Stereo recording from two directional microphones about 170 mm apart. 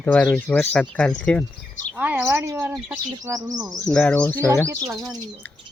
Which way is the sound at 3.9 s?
5° left (ahead or behind).